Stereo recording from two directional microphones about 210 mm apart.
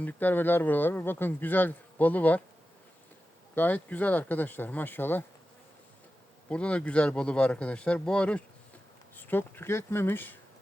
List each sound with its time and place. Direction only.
0.0 s speech: 10° left (ahead or behind)
3.5 s speech: 10° left (ahead or behind)
6.5 s speech: 5° left (ahead or behind)